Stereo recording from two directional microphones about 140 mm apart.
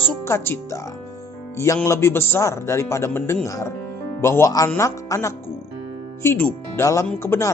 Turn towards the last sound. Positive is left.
turn(degrees=15)  # may be behind; listen again after turning